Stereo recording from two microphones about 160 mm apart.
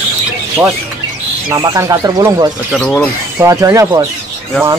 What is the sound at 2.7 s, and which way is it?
Speech, centre (ahead or behind).